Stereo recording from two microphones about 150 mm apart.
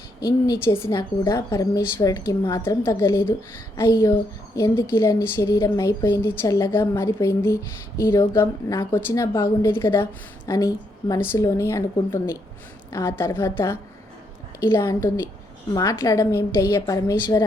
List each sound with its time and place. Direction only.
0.2 s a woman's voice: 25° left (ahead or behind)
14.8 s a woman's voice: 20° left (ahead or behind)